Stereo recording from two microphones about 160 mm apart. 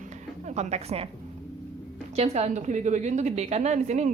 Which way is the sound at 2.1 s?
40° right (ahead or behind).